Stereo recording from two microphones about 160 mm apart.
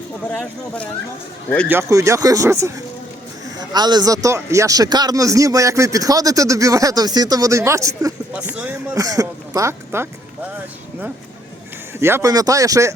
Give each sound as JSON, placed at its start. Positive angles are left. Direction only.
{"t": 0.3, "sound": "speech", "side_deg": 10}
{"t": 1.6, "sound": "speech", "side_deg": -15}
{"t": 8.3, "sound": "speech", "side_deg": -10}
{"t": 9.0, "sound": "speech", "side_deg": -20}
{"t": 11.9, "sound": "speech", "side_deg": -15}